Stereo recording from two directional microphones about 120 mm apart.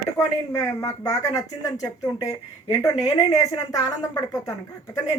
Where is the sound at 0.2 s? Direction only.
25° left (ahead or behind).